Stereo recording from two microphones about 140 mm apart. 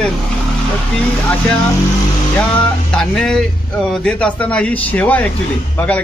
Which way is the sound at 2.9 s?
5° left (ahead or behind).